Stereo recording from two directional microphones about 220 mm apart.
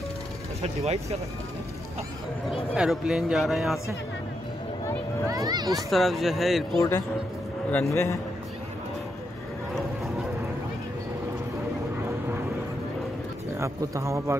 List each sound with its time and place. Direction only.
0.6 s speech: 30° right (ahead or behind)
2.7 s speech: 5° right (ahead or behind)
5.3 s speech: 15° right (ahead or behind)
5.9 s speech: centre (ahead or behind)
7.7 s a man's voice: 10° left (ahead or behind)
13.6 s speech: 15° right (ahead or behind)